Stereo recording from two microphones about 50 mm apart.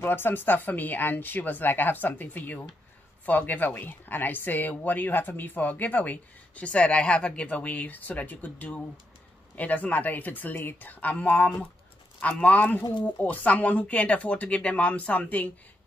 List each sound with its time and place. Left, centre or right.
0.0 s speech: left